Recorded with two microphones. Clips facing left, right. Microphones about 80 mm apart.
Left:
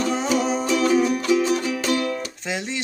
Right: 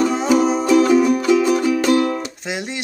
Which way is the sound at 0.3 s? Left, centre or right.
Right.